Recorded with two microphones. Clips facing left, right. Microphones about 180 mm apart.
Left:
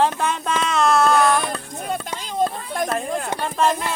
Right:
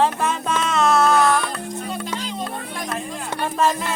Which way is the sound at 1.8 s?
50° left (ahead or behind).